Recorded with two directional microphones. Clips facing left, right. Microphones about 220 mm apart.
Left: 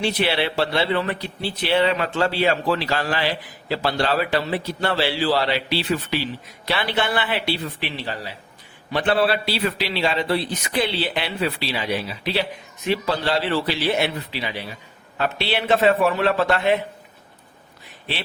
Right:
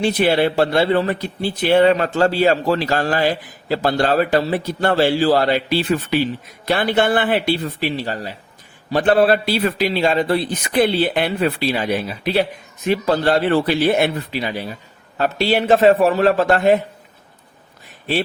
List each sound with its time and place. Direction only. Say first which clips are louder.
0.0 s speech: right 6 dB; 45° right (ahead or behind)